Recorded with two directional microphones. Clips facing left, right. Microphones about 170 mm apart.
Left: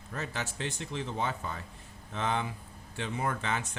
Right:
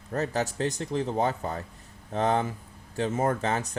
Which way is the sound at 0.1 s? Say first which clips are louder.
Right 9 dB; 40° right (ahead or behind).